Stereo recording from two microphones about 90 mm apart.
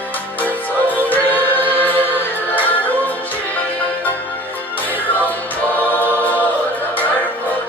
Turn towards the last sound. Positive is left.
turn(degrees=20)  # may be behind; listen again after turning